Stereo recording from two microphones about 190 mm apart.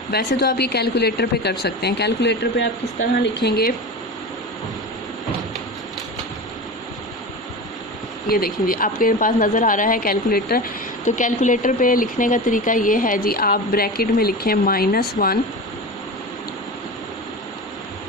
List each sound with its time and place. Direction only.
0.1 s speech: 55° left (ahead or behind)
8.3 s speech: 50° left (ahead or behind)